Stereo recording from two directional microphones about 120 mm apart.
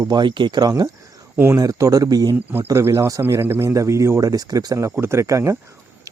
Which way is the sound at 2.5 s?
20° right (ahead or behind).